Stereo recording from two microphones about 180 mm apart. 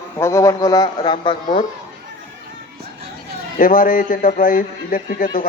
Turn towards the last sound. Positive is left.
turn(degrees=50)  # may be behind; listen again after turning